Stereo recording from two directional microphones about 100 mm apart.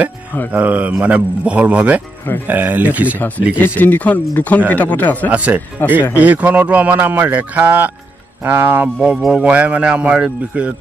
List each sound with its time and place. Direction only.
0.5 s speech: 15° right (ahead or behind)
3.5 s speech: 20° left (ahead or behind)
5.3 s speech: 15° right (ahead or behind)
5.8 s speech: 20° left (ahead or behind)
6.1 s speech: 15° right (ahead or behind)
9.0 s speech: 5° right (ahead or behind)